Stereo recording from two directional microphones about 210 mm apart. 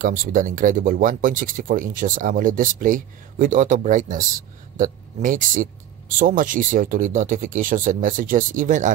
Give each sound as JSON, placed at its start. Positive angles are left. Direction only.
{"t": 0.0, "sound": "speech", "side_deg": -40}